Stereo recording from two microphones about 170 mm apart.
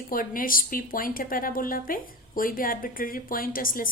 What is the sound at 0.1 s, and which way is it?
A woman's voice, 55° left (ahead or behind).